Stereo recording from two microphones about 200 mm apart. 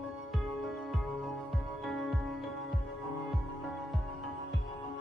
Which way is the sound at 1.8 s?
Centre (ahead or behind).